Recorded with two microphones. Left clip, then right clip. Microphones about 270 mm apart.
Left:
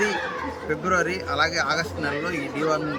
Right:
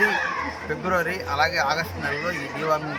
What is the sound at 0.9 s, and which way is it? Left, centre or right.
Speech, centre.